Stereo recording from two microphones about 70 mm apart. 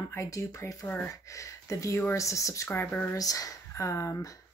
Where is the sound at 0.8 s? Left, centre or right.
Left.